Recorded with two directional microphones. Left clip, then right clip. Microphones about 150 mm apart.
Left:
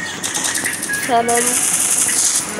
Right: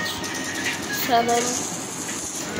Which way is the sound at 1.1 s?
25° left (ahead or behind).